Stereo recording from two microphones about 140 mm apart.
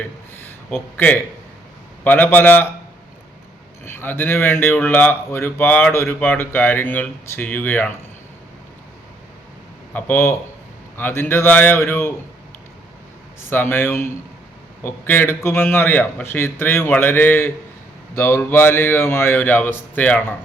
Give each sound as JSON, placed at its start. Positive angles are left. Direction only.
{"t": 0.3, "sound": "a sound", "side_deg": 15}
{"t": 2.0, "sound": "speech", "side_deg": 15}
{"t": 3.8, "sound": "speech", "side_deg": 15}
{"t": 9.9, "sound": "speech", "side_deg": 15}
{"t": 13.5, "sound": "speech", "side_deg": 15}